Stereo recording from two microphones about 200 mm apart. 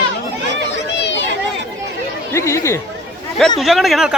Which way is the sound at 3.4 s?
Centre (ahead or behind).